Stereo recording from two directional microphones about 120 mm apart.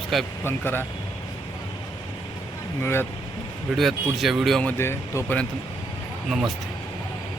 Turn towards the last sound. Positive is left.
turn(degrees=0)  # may be behind; listen again after turning